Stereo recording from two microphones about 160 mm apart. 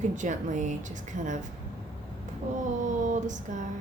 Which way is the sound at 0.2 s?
50° right (ahead or behind).